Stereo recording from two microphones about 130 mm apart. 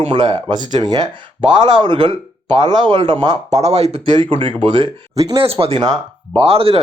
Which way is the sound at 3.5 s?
60° right (ahead or behind).